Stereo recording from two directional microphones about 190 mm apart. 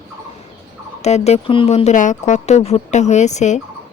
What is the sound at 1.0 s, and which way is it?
Speech, 35° left (ahead or behind).